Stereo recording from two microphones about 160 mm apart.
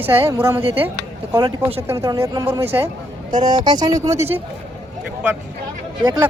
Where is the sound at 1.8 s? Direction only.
20° right (ahead or behind).